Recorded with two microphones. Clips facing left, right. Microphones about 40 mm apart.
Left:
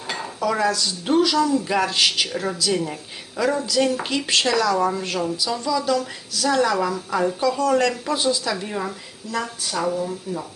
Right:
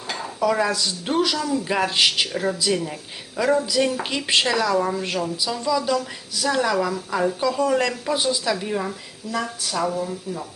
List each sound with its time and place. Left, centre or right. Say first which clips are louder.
0.3 s a woman's voice: right 1 dB; centre
4.8 s a woman's voice: left 1 dB; centre